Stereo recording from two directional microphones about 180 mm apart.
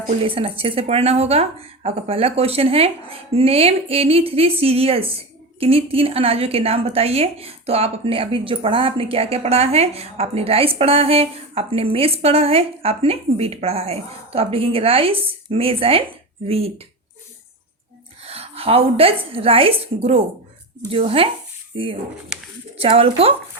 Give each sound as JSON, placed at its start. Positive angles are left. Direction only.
{"t": 0.2, "sound": "speech", "side_deg": -30}
{"t": 18.3, "sound": "a woman's voice", "side_deg": -35}